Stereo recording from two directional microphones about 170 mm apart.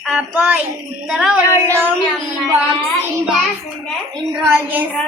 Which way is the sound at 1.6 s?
15° right (ahead or behind).